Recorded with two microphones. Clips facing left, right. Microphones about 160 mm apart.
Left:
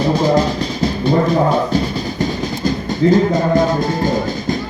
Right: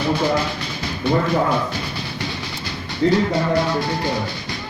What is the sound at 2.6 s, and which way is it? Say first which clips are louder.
Speech: left 5 dB; 45° left (ahead or behind).